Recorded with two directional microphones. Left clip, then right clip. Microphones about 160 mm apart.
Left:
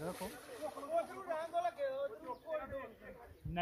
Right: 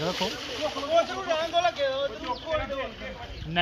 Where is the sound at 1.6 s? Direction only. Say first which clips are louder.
Right 13 dB; 50° left (ahead or behind).